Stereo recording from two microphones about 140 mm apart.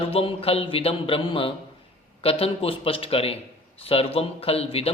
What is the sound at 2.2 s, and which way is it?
Speech, 40° left (ahead or behind).